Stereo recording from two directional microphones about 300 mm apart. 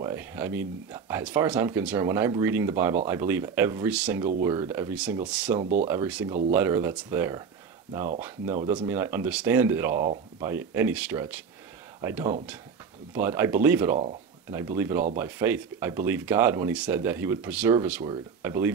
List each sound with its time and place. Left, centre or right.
0.0 s speech: centre
5.6 s speech: right
5.9 s speech: centre
8.6 s speech: centre